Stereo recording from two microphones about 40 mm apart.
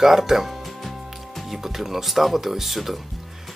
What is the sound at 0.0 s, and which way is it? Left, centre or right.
Speech, centre.